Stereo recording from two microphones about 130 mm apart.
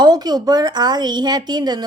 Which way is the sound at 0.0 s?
30° right (ahead or behind).